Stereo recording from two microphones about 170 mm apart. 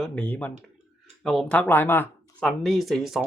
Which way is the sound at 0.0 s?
10° left (ahead or behind).